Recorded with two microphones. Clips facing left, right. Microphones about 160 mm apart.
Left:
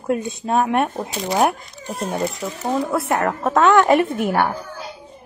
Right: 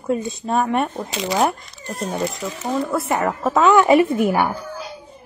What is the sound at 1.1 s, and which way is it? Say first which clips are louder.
Speech: right 1 dB; 90° right.